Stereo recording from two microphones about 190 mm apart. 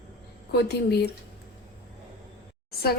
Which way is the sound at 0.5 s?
60° left (ahead or behind).